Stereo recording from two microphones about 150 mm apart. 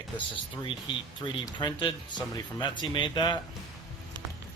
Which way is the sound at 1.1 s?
30° left (ahead or behind).